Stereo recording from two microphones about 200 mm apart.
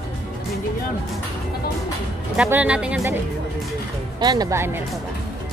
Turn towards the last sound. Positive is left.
turn(degrees=-15)  # may be behind; listen again after turning